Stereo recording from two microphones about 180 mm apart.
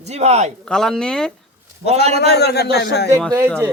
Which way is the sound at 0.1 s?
40° right (ahead or behind).